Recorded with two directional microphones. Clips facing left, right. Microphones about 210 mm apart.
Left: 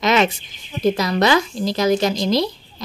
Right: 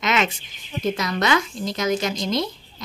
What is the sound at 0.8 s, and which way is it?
Speech, 35° left (ahead or behind).